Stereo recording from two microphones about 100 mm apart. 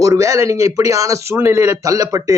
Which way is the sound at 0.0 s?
35° right (ahead or behind).